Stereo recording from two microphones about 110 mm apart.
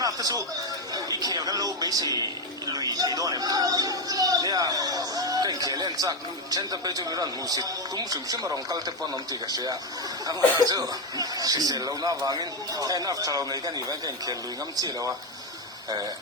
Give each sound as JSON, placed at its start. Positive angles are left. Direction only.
{"t": 0.0, "sound": "a sound", "side_deg": -35}
{"t": 0.9, "sound": "speech", "side_deg": -35}
{"t": 14.8, "sound": "speech", "side_deg": -35}